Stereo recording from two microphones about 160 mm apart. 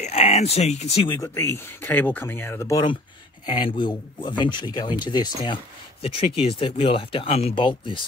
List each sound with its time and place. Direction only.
0.0 s speech: 40° left (ahead or behind)
1.3 s speech: 15° left (ahead or behind)